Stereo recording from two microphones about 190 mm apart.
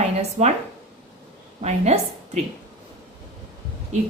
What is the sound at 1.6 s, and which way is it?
Speech, 35° right (ahead or behind).